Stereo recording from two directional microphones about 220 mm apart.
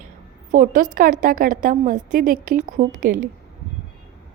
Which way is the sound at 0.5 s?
35° right (ahead or behind).